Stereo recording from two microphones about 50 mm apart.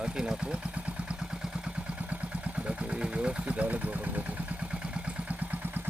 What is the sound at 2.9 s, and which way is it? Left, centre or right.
Speech, right.